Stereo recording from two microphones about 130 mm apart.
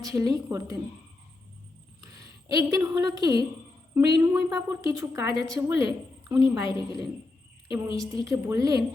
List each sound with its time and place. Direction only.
0.0 s a woman's voice: 25° right (ahead or behind)
2.0 s a woman's voice: 30° right (ahead or behind)
7.7 s a woman's voice: 25° right (ahead or behind)